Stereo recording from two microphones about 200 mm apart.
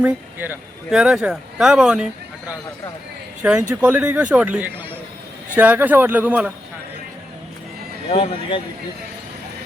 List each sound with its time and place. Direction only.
0.0 s speech: 10° right (ahead or behind)
3.4 s speech: 5° right (ahead or behind)
8.1 s speech: 25° left (ahead or behind)